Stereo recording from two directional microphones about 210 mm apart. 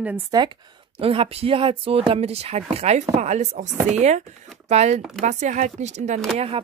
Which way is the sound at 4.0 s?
35° right (ahead or behind).